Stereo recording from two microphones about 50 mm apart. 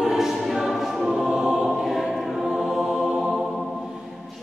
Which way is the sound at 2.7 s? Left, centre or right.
Centre.